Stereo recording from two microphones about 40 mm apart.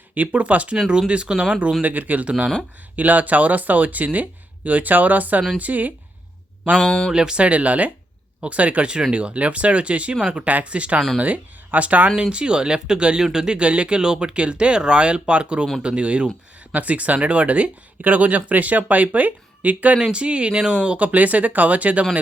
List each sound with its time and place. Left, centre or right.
0.1 s speech: right
1.8 s speech: right
6.7 s speech: centre
7.1 s speech: centre
7.4 s speech: right
8.9 s speech: right
10.4 s speech: right
12.3 s speech: right
13.6 s speech: right
20.0 s speech: right
21.0 s speech: right